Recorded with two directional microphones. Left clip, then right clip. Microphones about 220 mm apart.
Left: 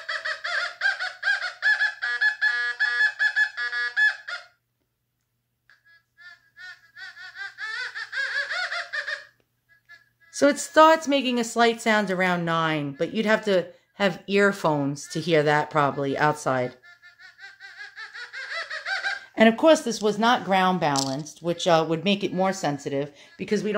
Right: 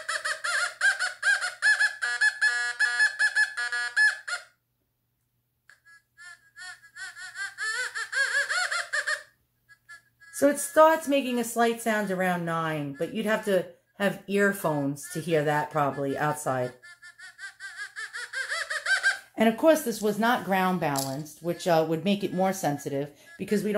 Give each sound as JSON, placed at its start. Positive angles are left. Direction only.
{"t": 0.2, "sound": "a sound", "side_deg": -40}
{"t": 7.0, "sound": "laughter", "side_deg": -45}
{"t": 10.3, "sound": "a woman's voice", "side_deg": 25}
{"t": 17.4, "sound": "laughter", "side_deg": -45}
{"t": 19.3, "sound": "speech", "side_deg": 20}